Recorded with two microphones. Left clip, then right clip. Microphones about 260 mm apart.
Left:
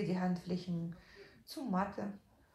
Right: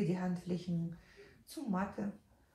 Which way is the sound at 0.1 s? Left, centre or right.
Left.